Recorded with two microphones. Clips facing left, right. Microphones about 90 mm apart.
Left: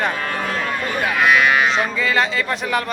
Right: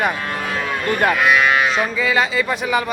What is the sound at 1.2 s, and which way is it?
Speech, centre (ahead or behind).